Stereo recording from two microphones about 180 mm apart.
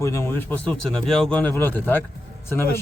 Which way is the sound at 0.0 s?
15° left (ahead or behind).